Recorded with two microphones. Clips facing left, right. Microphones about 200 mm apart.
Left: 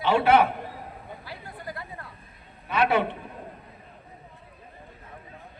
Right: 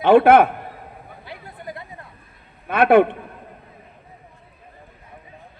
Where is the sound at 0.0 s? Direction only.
50° right (ahead or behind).